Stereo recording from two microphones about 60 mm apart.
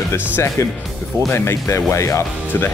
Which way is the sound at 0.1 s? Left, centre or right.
Left.